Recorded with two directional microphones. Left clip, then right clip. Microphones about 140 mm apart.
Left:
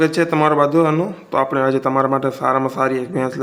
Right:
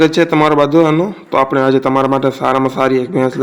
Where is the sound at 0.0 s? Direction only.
25° right (ahead or behind).